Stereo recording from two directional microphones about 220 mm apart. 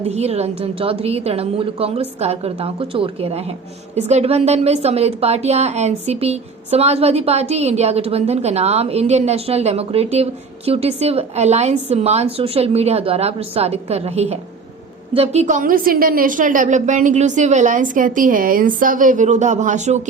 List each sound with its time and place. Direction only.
0.1 s a woman's voice: 30° right (ahead or behind)